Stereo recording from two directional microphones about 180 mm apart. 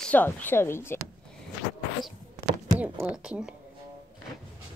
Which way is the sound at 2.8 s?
5° right (ahead or behind).